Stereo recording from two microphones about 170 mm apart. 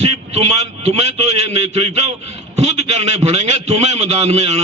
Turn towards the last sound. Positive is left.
turn(degrees=-40)  # may be behind; listen again after turning